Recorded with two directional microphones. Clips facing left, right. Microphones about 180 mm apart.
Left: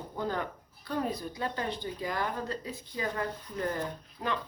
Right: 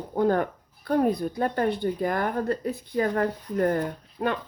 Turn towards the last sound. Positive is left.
turn(degrees=-55)  # may be behind; listen again after turning